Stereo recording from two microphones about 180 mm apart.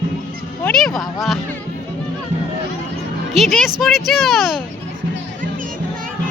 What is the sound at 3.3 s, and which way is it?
Speech, centre (ahead or behind).